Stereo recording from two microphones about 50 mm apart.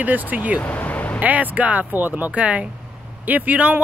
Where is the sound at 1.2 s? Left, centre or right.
Right.